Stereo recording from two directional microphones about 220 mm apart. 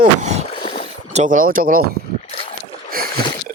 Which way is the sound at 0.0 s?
35° right (ahead or behind).